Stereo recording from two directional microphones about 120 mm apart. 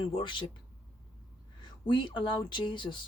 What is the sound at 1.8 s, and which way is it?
Speech, 40° left (ahead or behind).